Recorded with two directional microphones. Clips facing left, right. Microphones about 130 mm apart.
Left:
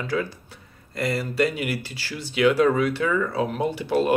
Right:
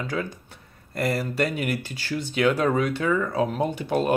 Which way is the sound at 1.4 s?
50° right (ahead or behind).